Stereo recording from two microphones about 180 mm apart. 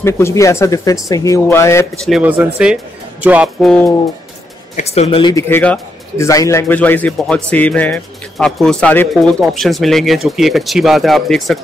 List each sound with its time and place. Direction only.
0.0 s speech: 15° left (ahead or behind)
2.0 s speech: 5° right (ahead or behind)
4.7 s speech: 35° left (ahead or behind)
5.3 s a man's voice: 10° left (ahead or behind)